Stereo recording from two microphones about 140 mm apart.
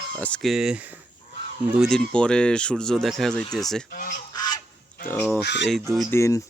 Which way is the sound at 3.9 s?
85° left.